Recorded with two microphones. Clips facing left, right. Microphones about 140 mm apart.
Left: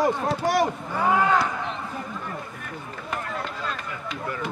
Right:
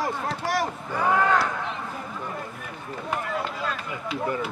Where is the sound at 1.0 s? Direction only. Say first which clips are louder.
Left 1 dB; 5° left (ahead or behind).